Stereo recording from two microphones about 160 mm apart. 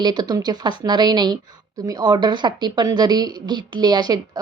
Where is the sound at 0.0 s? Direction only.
25° right (ahead or behind).